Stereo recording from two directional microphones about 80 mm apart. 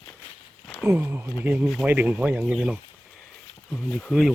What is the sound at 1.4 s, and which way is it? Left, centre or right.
Speech, centre.